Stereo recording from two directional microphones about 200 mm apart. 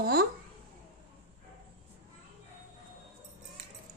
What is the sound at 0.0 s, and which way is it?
Speech, 50° right (ahead or behind).